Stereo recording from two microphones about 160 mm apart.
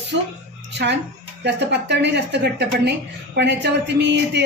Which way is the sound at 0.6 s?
90° right.